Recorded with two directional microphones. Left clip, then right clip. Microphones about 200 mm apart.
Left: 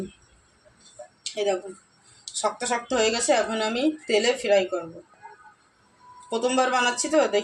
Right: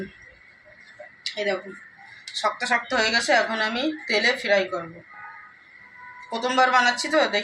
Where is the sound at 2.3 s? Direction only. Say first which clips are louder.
Right 3 dB; 35° left (ahead or behind).